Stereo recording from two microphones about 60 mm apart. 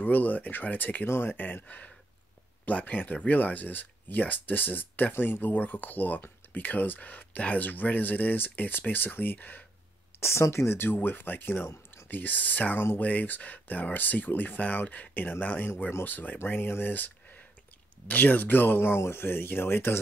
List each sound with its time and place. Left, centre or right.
0.0 s speech: left
10.2 s speech: left
11.6 s speech: left
12.1 s speech: left